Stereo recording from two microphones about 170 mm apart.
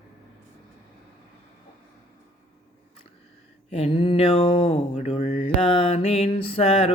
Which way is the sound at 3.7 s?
35° left (ahead or behind).